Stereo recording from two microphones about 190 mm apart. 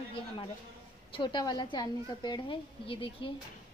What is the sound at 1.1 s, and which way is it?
A woman's voice, 25° left (ahead or behind).